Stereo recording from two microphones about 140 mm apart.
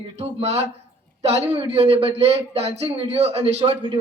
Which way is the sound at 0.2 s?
50° right (ahead or behind).